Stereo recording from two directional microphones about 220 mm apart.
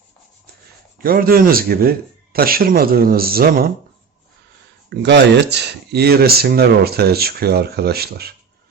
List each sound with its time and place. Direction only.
0.9 s speech: 40° right (ahead or behind)
4.9 s speech: 50° right (ahead or behind)